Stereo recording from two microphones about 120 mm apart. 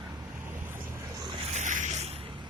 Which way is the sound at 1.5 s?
90° right.